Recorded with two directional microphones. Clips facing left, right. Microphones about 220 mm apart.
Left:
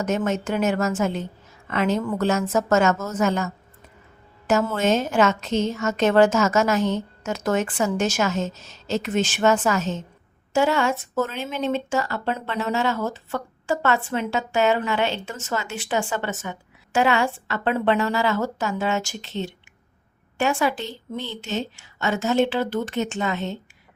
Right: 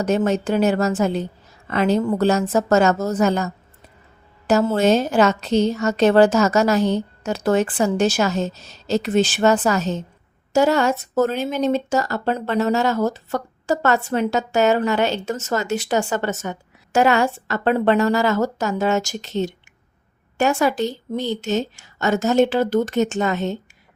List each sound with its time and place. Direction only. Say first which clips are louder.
0.0 s a woman's voice: right 4 dB; 35° right (ahead or behind)